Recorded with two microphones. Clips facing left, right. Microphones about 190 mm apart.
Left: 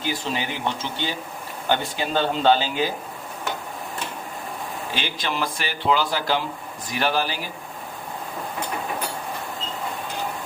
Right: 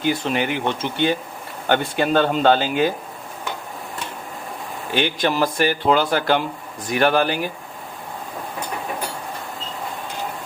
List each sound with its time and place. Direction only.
0.0 s speech: 55° right (ahead or behind)
4.9 s speech: 60° right (ahead or behind)